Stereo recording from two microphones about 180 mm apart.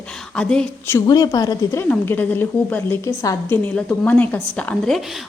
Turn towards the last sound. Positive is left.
turn(degrees=5)  # may be behind; listen again after turning